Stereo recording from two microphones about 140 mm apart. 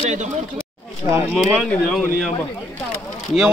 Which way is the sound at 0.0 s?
60° right (ahead or behind).